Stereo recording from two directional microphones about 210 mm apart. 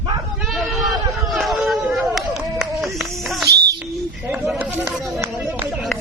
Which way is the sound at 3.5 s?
50° right (ahead or behind).